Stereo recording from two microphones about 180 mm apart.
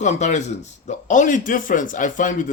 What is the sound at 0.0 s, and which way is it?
A man's voice, 40° left (ahead or behind).